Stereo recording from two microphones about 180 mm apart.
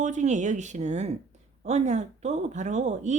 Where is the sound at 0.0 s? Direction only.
40° right (ahead or behind).